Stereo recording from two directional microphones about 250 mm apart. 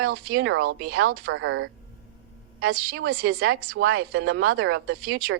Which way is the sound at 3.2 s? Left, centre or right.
Right.